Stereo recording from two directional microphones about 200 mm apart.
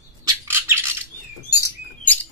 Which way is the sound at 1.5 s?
15° left (ahead or behind).